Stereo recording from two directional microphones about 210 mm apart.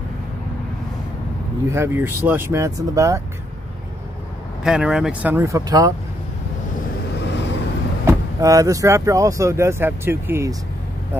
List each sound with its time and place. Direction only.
1.7 s speech: 10° right (ahead or behind)
4.6 s speech: 5° right (ahead or behind)
7.2 s vehicle: 55° left (ahead or behind)
8.1 s speech: 15° right (ahead or behind)